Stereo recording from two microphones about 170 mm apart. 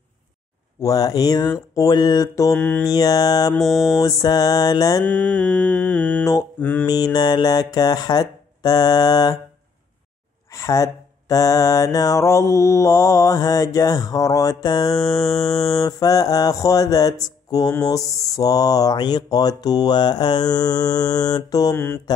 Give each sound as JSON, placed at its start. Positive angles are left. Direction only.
{"t": 0.8, "sound": "mantra", "side_deg": 20}
{"t": 2.9, "sound": "mantra", "side_deg": 20}
{"t": 3.5, "sound": "mantra", "side_deg": 0}
{"t": 4.0, "sound": "mantra", "side_deg": 20}
{"t": 5.0, "sound": "mantra", "side_deg": 5}
{"t": 6.9, "sound": "mantra", "side_deg": 25}
{"t": 10.5, "sound": "mantra", "side_deg": 20}